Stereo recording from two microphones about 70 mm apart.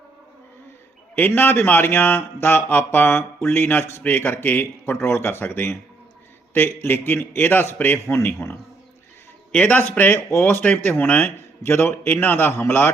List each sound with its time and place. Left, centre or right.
1.4 s speech: left
9.5 s a man's voice: centre
10.2 s speech: left